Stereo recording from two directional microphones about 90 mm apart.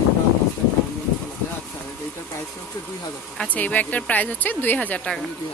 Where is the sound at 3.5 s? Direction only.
15° left (ahead or behind).